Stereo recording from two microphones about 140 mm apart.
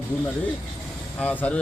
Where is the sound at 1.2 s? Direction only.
10° left (ahead or behind).